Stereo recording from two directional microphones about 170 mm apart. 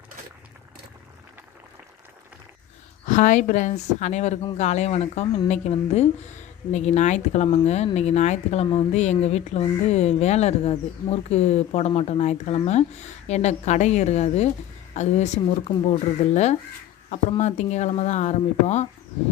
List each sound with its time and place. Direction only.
3.1 s a woman's voice: 45° left (ahead or behind)
8.6 s speech: 25° left (ahead or behind)
8.9 s speech: 40° left (ahead or behind)